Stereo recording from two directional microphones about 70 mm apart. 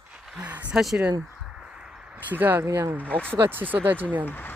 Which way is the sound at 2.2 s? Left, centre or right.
Right.